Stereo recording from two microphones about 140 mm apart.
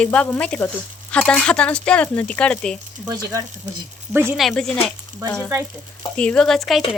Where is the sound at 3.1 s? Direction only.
25° right (ahead or behind).